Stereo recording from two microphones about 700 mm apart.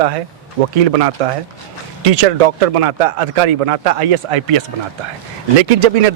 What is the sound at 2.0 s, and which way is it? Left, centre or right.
Speech, right.